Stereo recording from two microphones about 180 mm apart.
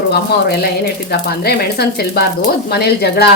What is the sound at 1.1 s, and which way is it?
Speech, 60° left (ahead or behind).